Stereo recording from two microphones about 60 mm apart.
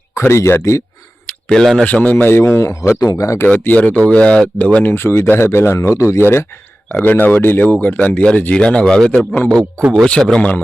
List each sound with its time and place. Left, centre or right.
0.1 s speech: left
1.3 s a sound: centre
1.8 s speech: left
2.2 s speech: left
3.0 s speech: left
3.8 s speech: left
4.9 s speech: left
7.0 s speech: left; by 10.5 s centre